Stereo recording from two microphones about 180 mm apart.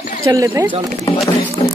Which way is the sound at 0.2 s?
20° right (ahead or behind).